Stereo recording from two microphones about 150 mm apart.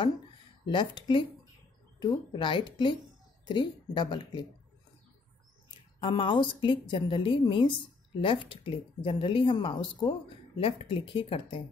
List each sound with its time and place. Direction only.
0.7 s speech: 30° left (ahead or behind)
5.9 s speech: 35° left (ahead or behind)